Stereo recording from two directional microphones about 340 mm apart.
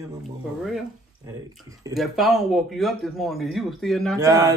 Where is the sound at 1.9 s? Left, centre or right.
Centre.